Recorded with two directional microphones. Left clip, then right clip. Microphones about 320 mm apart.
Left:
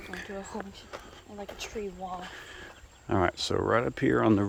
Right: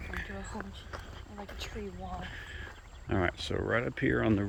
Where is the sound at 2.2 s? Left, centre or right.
Centre.